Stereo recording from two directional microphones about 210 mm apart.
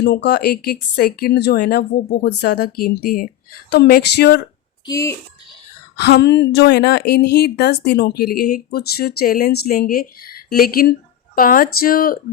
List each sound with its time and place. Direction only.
0.0 s a woman's voice: 55° left (ahead or behind)
4.9 s speech: 15° left (ahead or behind)
6.0 s a woman's voice: 55° left (ahead or behind)